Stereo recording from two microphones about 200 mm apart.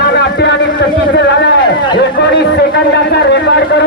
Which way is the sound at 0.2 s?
60° left (ahead or behind).